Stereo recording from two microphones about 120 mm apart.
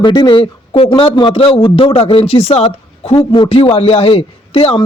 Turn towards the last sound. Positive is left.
turn(degrees=50)  # may be behind; listen again after turning